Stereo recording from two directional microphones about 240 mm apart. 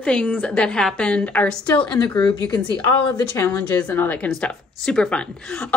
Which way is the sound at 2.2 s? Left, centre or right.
Centre.